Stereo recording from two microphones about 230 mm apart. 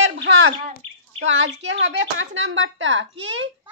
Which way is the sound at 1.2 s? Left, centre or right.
Right.